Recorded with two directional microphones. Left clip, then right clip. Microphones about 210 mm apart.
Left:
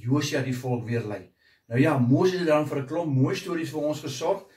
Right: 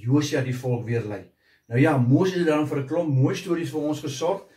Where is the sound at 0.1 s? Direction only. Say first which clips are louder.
Right 3 dB; 10° left (ahead or behind).